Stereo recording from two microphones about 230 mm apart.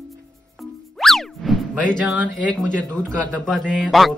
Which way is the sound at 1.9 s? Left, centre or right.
Centre.